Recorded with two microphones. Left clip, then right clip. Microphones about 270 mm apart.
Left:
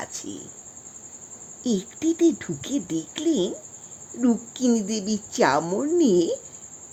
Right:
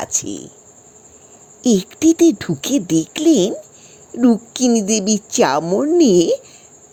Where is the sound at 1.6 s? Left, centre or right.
Right.